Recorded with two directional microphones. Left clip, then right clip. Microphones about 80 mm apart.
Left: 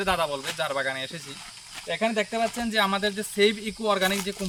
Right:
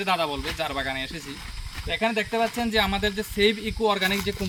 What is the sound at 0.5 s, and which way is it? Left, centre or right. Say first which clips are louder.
Speech: left 2 dB; left.